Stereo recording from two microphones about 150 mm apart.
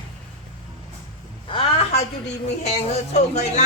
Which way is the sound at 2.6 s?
50° left (ahead or behind).